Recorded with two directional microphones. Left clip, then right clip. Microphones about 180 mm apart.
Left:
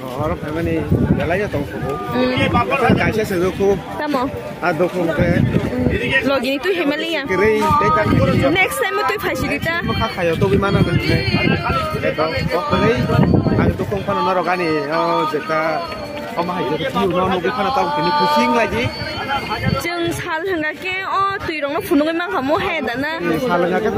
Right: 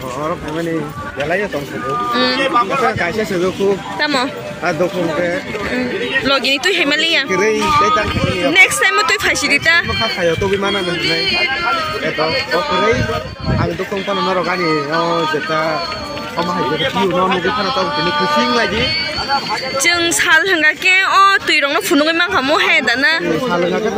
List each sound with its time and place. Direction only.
6.2 s speech: 25° left (ahead or behind)
10.7 s speech: 65° left (ahead or behind)
14.2 s speech: 30° left (ahead or behind)
18.0 s speech: 60° left (ahead or behind)
19.8 s speech: 15° left (ahead or behind)